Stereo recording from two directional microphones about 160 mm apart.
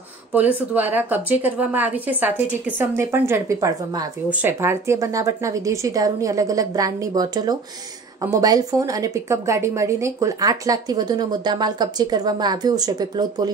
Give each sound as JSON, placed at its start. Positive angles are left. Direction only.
{"t": 0.3, "sound": "a woman's voice", "side_deg": -10}